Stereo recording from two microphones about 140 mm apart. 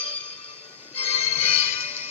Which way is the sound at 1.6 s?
45° left (ahead or behind).